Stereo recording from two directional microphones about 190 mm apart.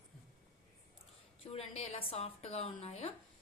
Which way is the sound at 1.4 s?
30° left (ahead or behind).